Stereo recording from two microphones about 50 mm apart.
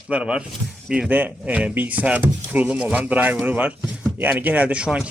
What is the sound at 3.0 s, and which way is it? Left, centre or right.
Speech, right.